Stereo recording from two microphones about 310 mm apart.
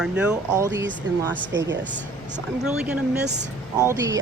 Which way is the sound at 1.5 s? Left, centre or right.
Right.